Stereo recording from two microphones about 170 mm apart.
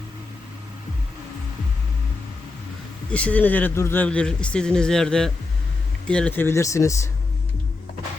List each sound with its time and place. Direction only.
3.1 s speech: 5° left (ahead or behind)